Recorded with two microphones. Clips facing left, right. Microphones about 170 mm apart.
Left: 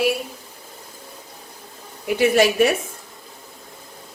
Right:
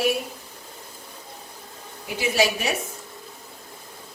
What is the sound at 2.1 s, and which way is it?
Speech, 60° left (ahead or behind).